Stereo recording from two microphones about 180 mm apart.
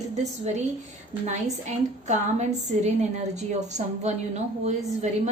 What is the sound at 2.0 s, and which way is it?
A woman's voice, 40° right (ahead or behind).